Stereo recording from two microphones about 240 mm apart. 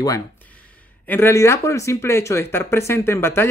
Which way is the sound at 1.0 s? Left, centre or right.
Centre.